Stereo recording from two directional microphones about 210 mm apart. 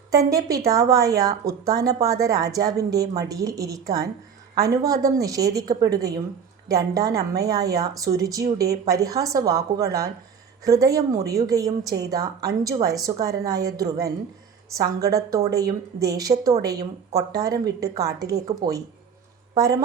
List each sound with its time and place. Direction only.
0.1 s speech: 15° right (ahead or behind)